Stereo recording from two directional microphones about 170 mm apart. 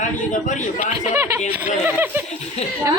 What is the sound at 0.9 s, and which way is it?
Speech, 15° right (ahead or behind).